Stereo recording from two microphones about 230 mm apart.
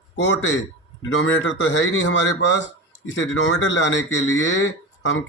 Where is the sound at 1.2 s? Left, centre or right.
Left.